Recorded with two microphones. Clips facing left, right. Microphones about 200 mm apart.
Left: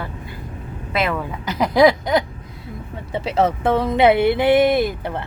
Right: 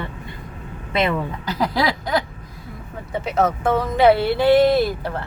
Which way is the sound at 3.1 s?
30° left (ahead or behind).